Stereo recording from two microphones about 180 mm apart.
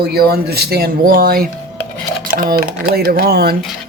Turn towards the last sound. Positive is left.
turn(degrees=-60)  # may be behind; listen again after turning